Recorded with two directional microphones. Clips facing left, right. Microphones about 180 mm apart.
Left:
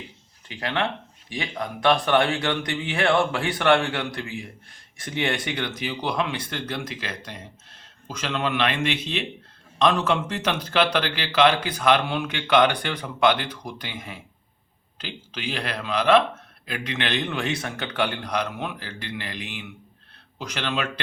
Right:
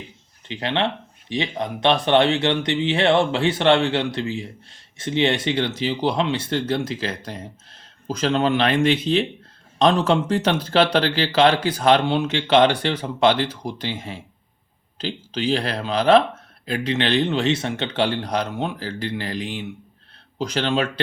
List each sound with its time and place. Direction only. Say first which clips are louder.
0.4 s speech: right 4 dB; 25° right (ahead or behind)